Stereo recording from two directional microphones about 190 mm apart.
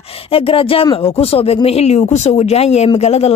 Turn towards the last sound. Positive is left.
turn(degrees=35)  # may be behind; listen again after turning